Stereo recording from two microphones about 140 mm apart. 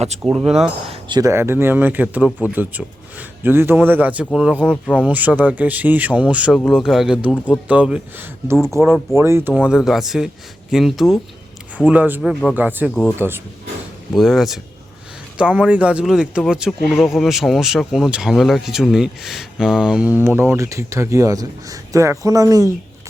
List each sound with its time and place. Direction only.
0.2 s speech: 5° right (ahead or behind)
0.9 s chink: 35° right (ahead or behind)
1.2 s speech: 20° right (ahead or behind)
9.6 s speech: 5° right (ahead or behind)
11.9 s speech: 10° right (ahead or behind)
14.1 s speech: centre (ahead or behind); by 22.7 s 25° right (ahead or behind)